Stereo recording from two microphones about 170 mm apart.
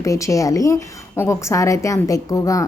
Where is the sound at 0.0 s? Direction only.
20° left (ahead or behind).